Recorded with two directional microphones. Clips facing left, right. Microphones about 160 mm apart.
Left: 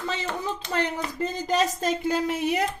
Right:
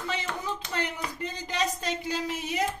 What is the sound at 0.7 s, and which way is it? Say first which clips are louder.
Speech: left 8 dB; 40° left (ahead or behind).